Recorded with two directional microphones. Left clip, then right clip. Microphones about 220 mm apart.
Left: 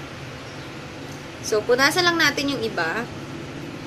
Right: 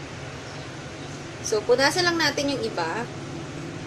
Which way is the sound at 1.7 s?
10° left (ahead or behind).